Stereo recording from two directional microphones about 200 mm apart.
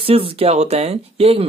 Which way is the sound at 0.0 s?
30° right (ahead or behind).